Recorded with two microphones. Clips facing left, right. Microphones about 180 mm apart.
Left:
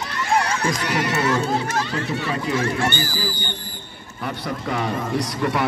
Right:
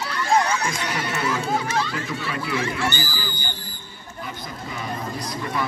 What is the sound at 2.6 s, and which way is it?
Speech, 55° left (ahead or behind).